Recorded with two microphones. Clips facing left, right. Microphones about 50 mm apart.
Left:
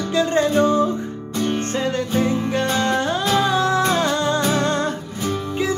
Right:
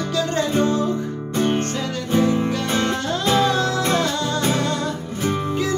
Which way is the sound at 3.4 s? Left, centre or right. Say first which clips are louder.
Even; centre.